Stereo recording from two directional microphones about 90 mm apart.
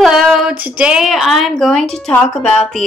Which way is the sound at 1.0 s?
Centre (ahead or behind).